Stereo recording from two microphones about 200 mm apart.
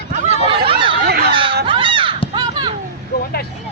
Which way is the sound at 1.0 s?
55° right (ahead or behind).